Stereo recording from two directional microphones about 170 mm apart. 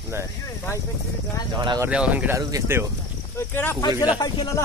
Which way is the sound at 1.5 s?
25° right (ahead or behind).